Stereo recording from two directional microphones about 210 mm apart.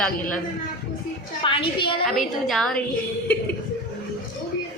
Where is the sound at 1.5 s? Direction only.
25° left (ahead or behind).